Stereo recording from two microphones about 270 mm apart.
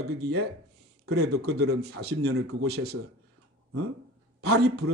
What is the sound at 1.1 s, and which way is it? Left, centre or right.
Speech, right.